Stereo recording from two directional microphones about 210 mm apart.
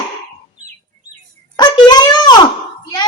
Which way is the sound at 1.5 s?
20° left (ahead or behind).